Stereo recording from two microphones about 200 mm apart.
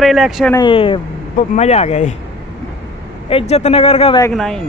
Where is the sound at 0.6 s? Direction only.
25° left (ahead or behind).